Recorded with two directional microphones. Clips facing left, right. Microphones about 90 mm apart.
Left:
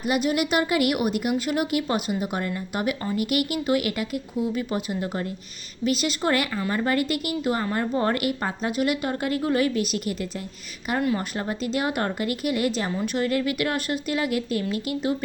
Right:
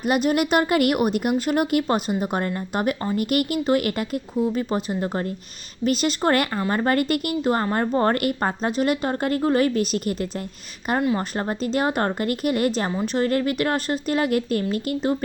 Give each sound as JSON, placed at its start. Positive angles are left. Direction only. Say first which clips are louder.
{"t": 0.0, "sound": "a woman's voice", "louder": "right 3 dB", "side_deg": -45}
{"t": 11.0, "sound": "a woman's voice", "louder": "right 1 dB", "side_deg": -25}
{"t": 11.3, "sound": "speech", "louder": "right 3 dB", "side_deg": -40}